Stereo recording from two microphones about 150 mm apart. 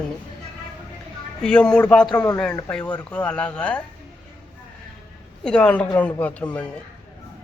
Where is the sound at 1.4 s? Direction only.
5° left (ahead or behind).